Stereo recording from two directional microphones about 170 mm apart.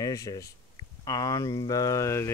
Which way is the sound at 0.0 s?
20° left (ahead or behind).